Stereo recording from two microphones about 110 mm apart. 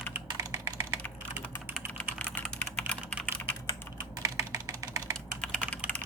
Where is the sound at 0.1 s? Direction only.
25° right (ahead or behind).